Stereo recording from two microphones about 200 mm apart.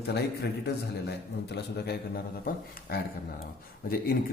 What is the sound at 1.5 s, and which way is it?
A man's voice, 55° left (ahead or behind).